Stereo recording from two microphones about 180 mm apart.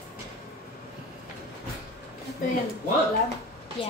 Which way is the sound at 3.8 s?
30° left (ahead or behind).